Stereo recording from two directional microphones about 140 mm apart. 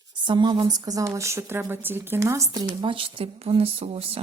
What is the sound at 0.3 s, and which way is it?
Speech, 35° right (ahead or behind).